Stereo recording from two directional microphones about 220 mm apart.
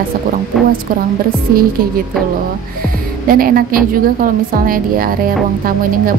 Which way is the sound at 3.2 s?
40° right (ahead or behind).